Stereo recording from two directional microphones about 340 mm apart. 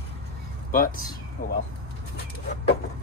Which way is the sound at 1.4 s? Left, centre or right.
Left.